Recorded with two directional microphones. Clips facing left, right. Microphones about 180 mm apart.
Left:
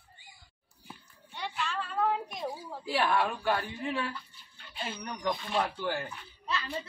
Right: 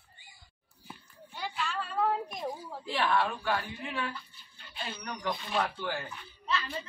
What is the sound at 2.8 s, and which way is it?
Speech, 10° left (ahead or behind).